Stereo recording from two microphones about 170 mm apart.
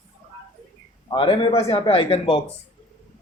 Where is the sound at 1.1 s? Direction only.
30° left (ahead or behind).